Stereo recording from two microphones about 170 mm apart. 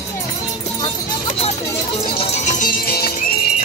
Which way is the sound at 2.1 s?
40° left (ahead or behind).